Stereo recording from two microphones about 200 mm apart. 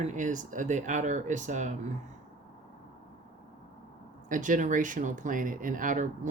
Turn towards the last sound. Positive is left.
turn(degrees=-40)  # may be behind; listen again after turning